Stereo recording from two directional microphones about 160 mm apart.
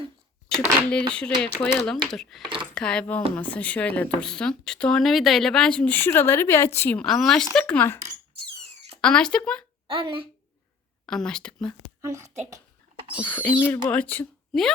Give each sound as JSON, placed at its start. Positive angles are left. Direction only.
{"t": 0.5, "sound": "a child's voice", "side_deg": 5}
{"t": 9.0, "sound": "speech", "side_deg": 5}
{"t": 9.8, "sound": "speech", "side_deg": -35}
{"t": 11.0, "sound": "speech", "side_deg": 5}
{"t": 12.0, "sound": "a woman's voice", "side_deg": -20}
{"t": 13.3, "sound": "speech", "side_deg": 10}